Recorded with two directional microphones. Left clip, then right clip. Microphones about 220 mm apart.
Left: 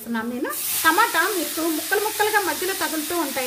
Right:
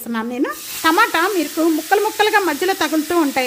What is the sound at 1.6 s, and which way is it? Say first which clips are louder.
Stir: right 8 dB; 45° right (ahead or behind).